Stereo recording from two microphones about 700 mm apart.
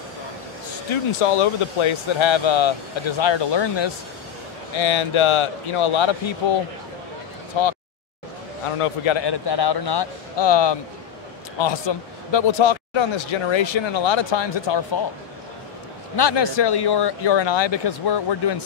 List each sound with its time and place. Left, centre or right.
1.2 s a man's voice: left
8.7 s a man's voice: left
16.2 s a man's voice: left